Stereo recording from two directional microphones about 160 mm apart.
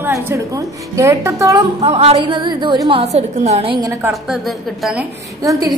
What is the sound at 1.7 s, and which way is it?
A woman's voice, 40° right (ahead or behind).